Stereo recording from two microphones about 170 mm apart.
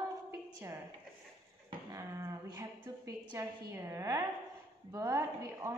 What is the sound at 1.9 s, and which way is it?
A woman's voice, 15° right (ahead or behind).